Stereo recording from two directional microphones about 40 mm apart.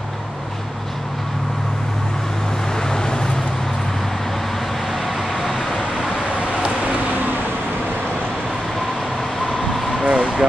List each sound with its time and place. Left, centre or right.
2.9 s vehicle: centre
5.0 s vehicle: centre
10.0 s vehicle: right